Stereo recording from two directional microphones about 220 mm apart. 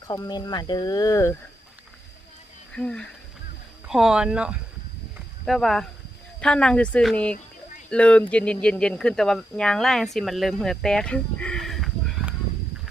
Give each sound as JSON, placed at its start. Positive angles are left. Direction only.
{"t": 0.1, "sound": "speech", "side_deg": 20}
{"t": 2.7, "sound": "speech", "side_deg": 5}